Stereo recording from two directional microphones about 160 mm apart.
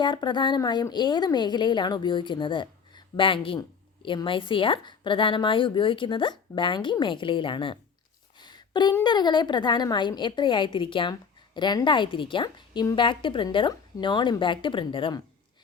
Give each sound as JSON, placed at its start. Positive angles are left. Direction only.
{"t": 0.0, "sound": "a woman's voice", "side_deg": 30}
{"t": 8.4, "sound": "a sound", "side_deg": 25}
{"t": 9.0, "sound": "a woman's voice", "side_deg": 25}